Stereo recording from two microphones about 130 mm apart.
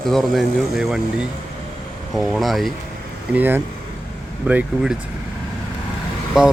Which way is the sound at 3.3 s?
15° right (ahead or behind).